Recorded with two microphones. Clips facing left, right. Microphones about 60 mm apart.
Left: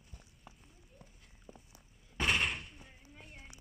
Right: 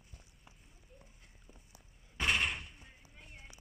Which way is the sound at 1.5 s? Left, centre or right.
Left.